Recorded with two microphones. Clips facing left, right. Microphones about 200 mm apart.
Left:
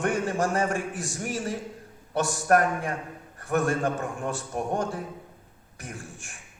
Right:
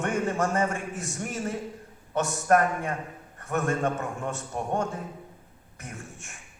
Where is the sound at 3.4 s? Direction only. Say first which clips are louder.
Left 2 dB; 30° left (ahead or behind).